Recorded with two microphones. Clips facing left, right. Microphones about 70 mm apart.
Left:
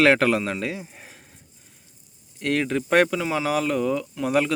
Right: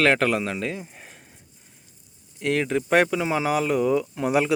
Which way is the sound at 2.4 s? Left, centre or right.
Centre.